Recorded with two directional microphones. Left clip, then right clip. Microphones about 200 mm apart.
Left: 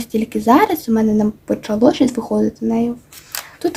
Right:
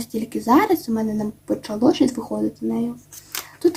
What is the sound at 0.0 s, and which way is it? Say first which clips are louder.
Speech: left 7 dB; 35° left (ahead or behind).